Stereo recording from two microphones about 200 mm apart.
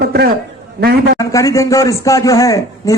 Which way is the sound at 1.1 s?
15° left (ahead or behind).